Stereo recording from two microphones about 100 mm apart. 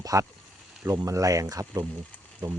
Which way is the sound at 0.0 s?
35° right (ahead or behind).